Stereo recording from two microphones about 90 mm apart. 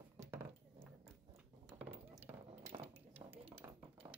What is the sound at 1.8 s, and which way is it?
Dishes, 20° right (ahead or behind).